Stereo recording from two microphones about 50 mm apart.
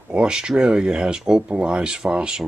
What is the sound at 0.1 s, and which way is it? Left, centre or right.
Speech, centre.